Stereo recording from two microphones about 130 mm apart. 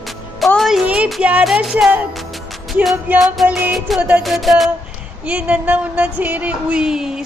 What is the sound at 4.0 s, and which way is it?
Music, 10° right (ahead or behind).